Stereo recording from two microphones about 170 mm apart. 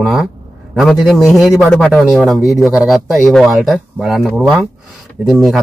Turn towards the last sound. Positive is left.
turn(degrees=0)  # may be behind; listen again after turning